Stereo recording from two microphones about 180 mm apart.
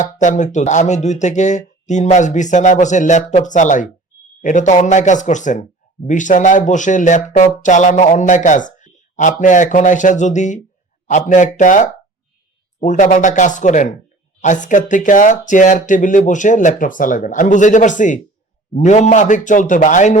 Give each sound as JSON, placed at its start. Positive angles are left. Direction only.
{"t": 0.0, "sound": "speech", "side_deg": 40}